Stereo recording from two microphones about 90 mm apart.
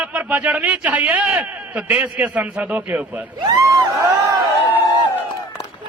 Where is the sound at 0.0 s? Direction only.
15° right (ahead or behind).